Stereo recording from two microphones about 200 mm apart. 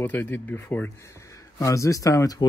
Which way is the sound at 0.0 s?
10° left (ahead or behind).